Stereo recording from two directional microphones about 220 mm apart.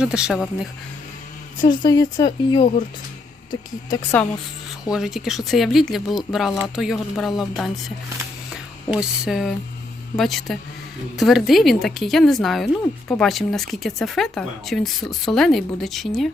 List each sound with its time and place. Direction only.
0.0 s speech: 5° right (ahead or behind)
1.8 s speech: 20° left (ahead or behind)
4.9 s speech: centre (ahead or behind)